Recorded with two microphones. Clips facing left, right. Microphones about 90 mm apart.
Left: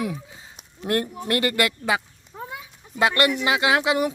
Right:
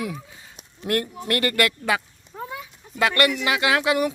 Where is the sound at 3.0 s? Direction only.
25° left (ahead or behind).